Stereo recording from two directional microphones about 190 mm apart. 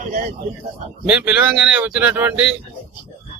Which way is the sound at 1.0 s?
5° right (ahead or behind).